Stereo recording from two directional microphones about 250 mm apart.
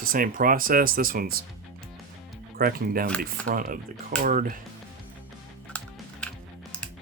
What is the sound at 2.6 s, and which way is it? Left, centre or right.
Speech, right.